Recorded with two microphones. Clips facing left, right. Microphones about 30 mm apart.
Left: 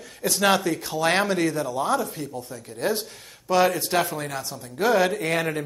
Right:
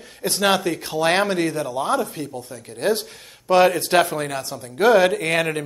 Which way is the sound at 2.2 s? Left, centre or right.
Centre.